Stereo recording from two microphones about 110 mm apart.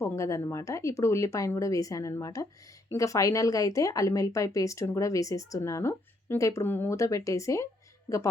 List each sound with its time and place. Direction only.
0.0 s speech: 25° left (ahead or behind)